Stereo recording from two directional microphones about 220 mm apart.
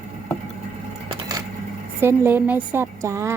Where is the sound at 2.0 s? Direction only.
10° right (ahead or behind).